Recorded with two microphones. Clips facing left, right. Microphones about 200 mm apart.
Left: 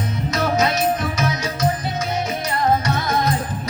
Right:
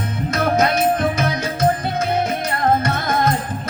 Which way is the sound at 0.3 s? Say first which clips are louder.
Right 2 dB; 55° right (ahead or behind).